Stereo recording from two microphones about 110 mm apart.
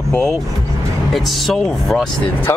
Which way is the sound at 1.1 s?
Centre (ahead or behind).